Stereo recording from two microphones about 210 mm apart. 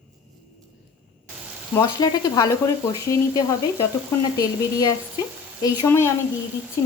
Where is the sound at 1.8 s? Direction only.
15° left (ahead or behind).